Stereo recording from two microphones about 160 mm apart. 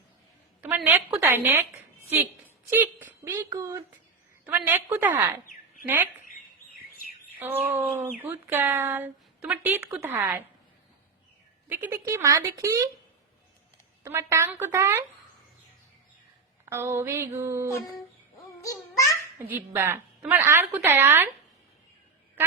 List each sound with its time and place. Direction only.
0.9 s speech: 15° right (ahead or behind)
7.3 s speech: 10° right (ahead or behind)
11.7 s speech: 15° right (ahead or behind)
14.0 s speech: 15° right (ahead or behind)
16.6 s speech: 15° right (ahead or behind)
18.6 s babbling: 20° left (ahead or behind)
19.4 s speech: 15° right (ahead or behind)